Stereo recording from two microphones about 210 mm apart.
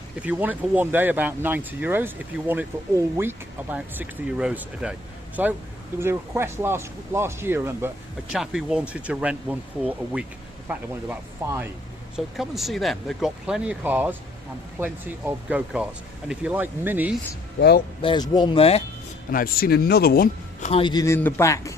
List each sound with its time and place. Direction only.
0.2 s speech: 5° right (ahead or behind)
12.1 s speech: centre (ahead or behind)
17.6 s speech: 50° left (ahead or behind)
18.0 s speech: 20° left (ahead or behind)
19.3 s speech: 45° left (ahead or behind); by 21.8 s 15° left (ahead or behind)